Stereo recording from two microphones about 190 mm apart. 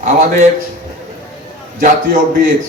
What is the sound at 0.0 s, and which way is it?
Speech, 45° right (ahead or behind).